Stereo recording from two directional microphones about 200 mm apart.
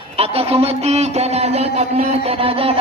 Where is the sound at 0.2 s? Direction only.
30° right (ahead or behind).